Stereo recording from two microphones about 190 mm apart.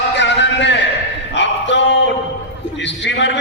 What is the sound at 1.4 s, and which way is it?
Dog, 70° left (ahead or behind).